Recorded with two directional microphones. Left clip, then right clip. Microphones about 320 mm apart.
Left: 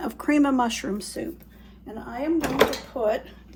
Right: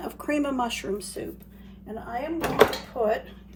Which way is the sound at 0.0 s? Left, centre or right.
Left.